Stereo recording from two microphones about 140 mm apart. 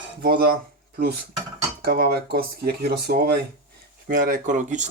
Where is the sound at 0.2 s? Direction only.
90° right.